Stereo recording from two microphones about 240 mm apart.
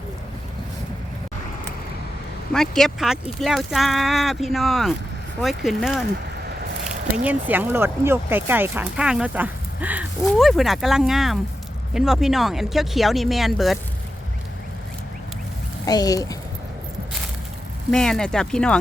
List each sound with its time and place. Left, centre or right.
2.5 s speech: centre
7.3 s speech: centre
15.9 s speech: centre
17.9 s speech: centre